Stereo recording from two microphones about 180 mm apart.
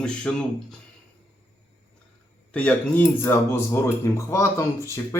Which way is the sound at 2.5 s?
5° left (ahead or behind).